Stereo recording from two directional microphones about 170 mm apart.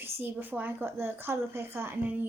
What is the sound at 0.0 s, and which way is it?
A woman's voice, 10° right (ahead or behind).